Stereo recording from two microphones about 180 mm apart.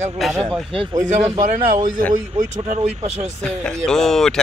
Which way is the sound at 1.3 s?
40° right (ahead or behind).